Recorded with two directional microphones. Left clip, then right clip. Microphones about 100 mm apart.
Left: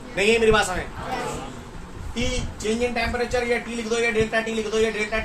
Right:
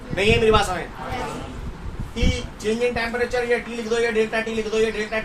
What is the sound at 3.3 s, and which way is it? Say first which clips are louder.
A man's voice: right 1 dB; 20° right (ahead or behind).